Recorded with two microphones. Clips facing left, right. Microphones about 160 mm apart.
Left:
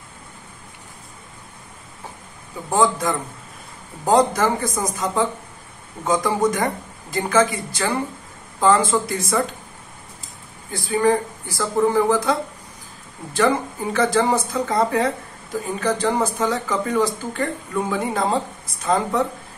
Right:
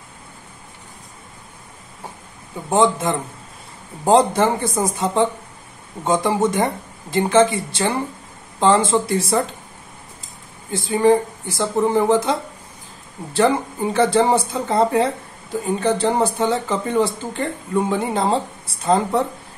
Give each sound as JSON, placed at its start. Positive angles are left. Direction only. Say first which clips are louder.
{"t": 2.7, "sound": "a man's voice", "louder": "right 2 dB", "side_deg": -25}
{"t": 10.7, "sound": "a man's voice", "louder": "right 3 dB", "side_deg": -20}
{"t": 13.9, "sound": "a man's voice", "louder": "right 3 dB", "side_deg": -30}